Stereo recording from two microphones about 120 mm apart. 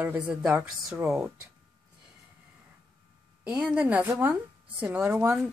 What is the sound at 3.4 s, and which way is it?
A woman's voice, 10° right (ahead or behind).